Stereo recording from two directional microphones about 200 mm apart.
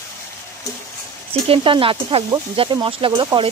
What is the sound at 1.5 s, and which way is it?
Speech, 25° right (ahead or behind).